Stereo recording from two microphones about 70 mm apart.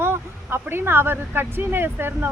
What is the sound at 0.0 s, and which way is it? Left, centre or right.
Speech, right.